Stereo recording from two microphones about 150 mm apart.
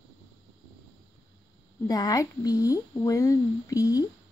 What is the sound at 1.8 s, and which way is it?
Speech, 25° left (ahead or behind).